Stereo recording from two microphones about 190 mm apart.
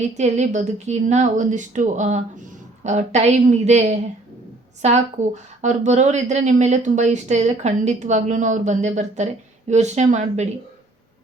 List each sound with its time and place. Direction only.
0.2 s a woman's voice: 35° right (ahead or behind)